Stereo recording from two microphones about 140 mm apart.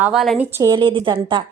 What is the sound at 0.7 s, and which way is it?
Speech, 35° right (ahead or behind).